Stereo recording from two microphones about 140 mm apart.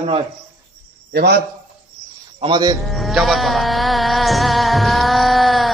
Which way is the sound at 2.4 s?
30° right (ahead or behind).